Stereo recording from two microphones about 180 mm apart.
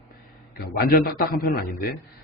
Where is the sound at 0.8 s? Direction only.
60° left (ahead or behind).